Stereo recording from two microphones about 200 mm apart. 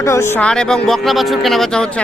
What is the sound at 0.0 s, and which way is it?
Speech, 15° left (ahead or behind).